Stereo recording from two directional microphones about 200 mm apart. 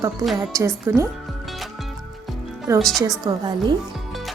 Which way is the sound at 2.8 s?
Centre (ahead or behind).